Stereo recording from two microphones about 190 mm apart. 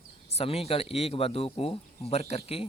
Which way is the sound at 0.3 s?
30° left (ahead or behind).